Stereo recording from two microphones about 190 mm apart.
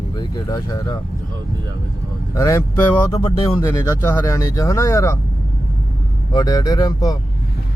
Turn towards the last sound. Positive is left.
turn(degrees=20)  # may be behind; listen again after turning